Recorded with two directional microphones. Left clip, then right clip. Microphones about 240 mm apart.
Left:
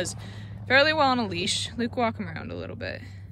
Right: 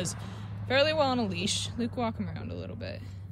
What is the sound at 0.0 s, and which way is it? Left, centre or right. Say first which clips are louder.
Speech: left 4 dB; centre.